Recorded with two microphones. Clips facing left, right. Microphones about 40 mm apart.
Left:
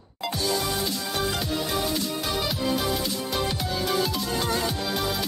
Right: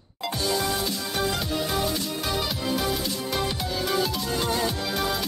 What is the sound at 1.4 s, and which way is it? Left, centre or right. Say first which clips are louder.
Music: right 1 dB; centre.